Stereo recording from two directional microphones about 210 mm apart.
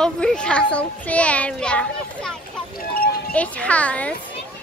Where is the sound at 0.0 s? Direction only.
5° left (ahead or behind).